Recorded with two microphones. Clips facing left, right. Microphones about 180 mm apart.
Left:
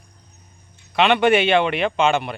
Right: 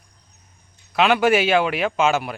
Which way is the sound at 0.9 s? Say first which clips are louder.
Left 1 dB; centre (ahead or behind).